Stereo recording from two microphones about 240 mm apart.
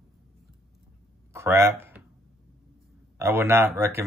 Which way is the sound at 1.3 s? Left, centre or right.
Centre.